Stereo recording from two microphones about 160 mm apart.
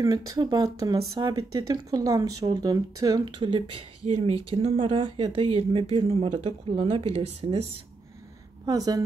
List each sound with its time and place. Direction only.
0.0 s speech: 20° right (ahead or behind)
8.6 s speech: 25° right (ahead or behind)